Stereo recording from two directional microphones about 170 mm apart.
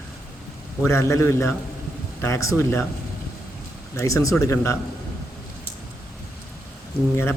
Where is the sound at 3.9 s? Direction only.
20° left (ahead or behind).